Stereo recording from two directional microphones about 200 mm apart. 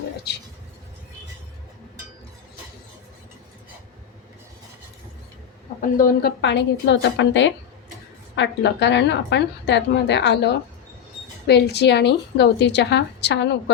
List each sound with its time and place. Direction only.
5.8 s a woman's voice: 50° left (ahead or behind)